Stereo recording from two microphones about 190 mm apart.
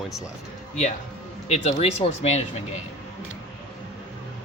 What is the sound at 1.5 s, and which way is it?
Speech, 35° left (ahead or behind).